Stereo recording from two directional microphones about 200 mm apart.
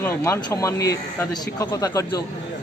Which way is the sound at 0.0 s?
15° left (ahead or behind).